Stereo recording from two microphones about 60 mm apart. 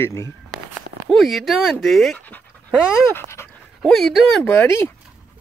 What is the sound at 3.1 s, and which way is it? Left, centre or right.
Speech, left.